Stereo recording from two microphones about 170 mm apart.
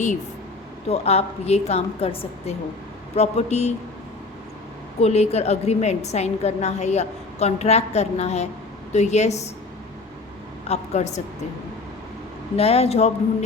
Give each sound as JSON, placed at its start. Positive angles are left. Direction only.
{"t": 0.9, "sound": "a woman's voice", "side_deg": 35}
{"t": 4.9, "sound": "a woman's voice", "side_deg": 40}
{"t": 10.7, "sound": "a woman's voice", "side_deg": 40}
{"t": 12.5, "sound": "a woman's voice", "side_deg": 35}